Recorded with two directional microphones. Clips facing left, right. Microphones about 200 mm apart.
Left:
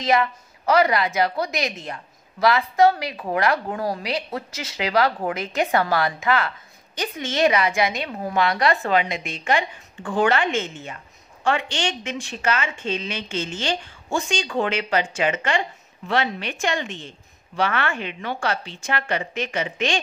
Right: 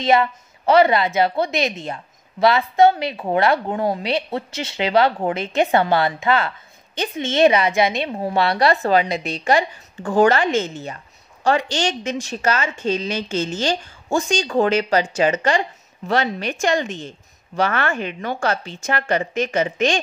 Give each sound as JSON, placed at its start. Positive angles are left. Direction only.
{"t": 0.0, "sound": "a woman's voice", "side_deg": -25}